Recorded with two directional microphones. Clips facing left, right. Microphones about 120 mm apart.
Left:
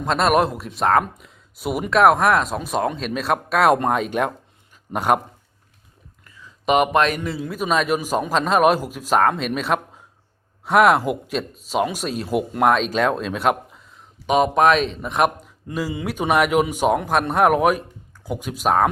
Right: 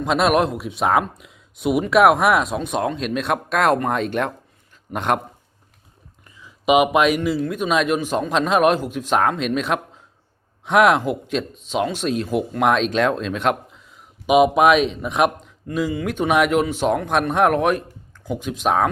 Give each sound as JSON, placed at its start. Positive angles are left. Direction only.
{"t": 0.0, "sound": "speech", "side_deg": 0}
{"t": 6.2, "sound": "a sound", "side_deg": -15}
{"t": 6.7, "sound": "a man's voice", "side_deg": -5}